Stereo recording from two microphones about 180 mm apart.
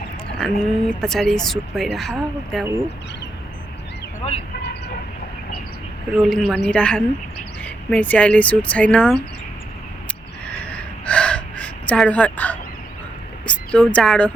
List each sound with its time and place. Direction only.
0.3 s speech: 5° left (ahead or behind)
4.2 s speech: 35° left (ahead or behind)
6.2 s speech: centre (ahead or behind)
10.4 s gasp: 5° left (ahead or behind)
13.5 s a woman's voice: 5° left (ahead or behind)